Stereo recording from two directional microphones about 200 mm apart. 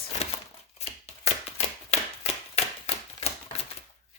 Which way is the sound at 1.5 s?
30° left (ahead or behind).